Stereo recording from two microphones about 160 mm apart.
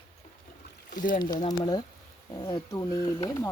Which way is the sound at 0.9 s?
55° left (ahead or behind).